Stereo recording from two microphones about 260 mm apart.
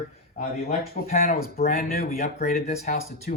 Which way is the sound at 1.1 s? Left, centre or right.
Left.